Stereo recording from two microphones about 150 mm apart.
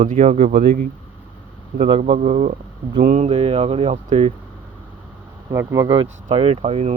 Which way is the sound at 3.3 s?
40° right (ahead or behind).